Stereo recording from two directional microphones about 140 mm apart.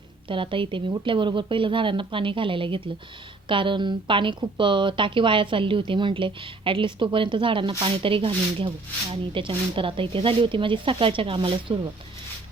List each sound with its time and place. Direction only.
0.3 s speech: 35° right (ahead or behind)